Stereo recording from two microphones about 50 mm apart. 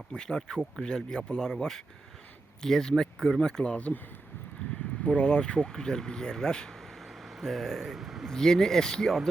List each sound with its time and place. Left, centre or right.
0.2 s speech: centre
3.6 s speech: left
5.0 s speech: left
7.3 s speech: centre
8.3 s speech: centre